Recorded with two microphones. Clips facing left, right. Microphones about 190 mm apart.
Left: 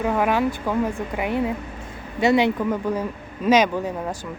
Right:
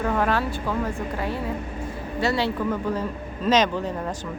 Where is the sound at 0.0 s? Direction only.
10° left (ahead or behind).